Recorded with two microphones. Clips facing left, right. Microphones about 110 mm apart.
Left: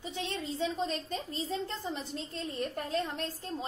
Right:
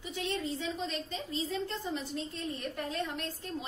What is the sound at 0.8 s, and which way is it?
Speech, 40° left (ahead or behind).